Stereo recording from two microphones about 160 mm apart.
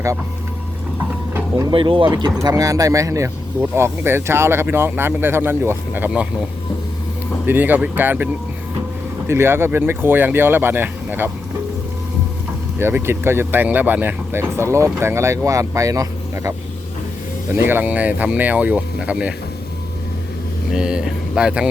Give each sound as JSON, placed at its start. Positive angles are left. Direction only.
{"t": 1.7, "sound": "speech", "side_deg": -30}
{"t": 7.4, "sound": "speech", "side_deg": -10}
{"t": 12.8, "sound": "speech", "side_deg": -15}
{"t": 20.7, "sound": "speech", "side_deg": -5}